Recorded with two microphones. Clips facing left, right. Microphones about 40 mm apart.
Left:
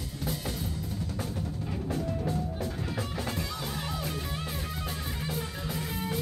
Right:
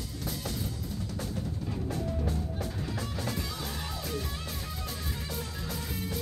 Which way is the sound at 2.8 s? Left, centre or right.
Centre.